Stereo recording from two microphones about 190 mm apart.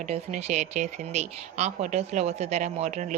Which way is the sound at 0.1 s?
35° right (ahead or behind).